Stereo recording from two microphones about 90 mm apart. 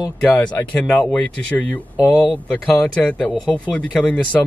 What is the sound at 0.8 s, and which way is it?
Speech, 10° left (ahead or behind).